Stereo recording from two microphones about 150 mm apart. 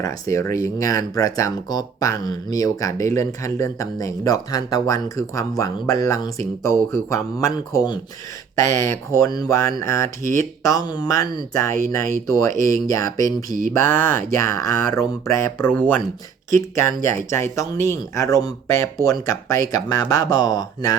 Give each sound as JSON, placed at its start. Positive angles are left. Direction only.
{"t": 0.0, "sound": "speech", "side_deg": 20}